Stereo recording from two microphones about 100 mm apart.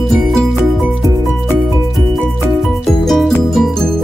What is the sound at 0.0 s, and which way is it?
Music, centre (ahead or behind).